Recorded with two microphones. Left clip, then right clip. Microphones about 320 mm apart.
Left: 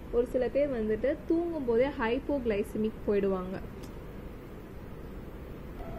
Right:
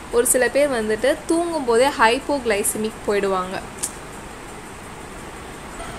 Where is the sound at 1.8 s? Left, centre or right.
Centre.